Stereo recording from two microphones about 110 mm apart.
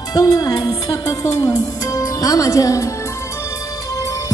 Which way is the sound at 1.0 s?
25° left (ahead or behind).